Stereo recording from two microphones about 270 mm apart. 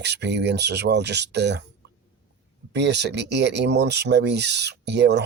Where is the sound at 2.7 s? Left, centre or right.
Right.